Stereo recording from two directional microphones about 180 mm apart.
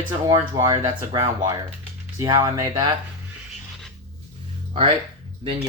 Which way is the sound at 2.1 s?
20° right (ahead or behind).